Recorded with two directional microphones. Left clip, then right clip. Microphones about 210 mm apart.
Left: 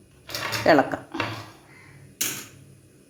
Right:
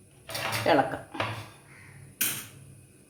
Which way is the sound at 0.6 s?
40° left (ahead or behind).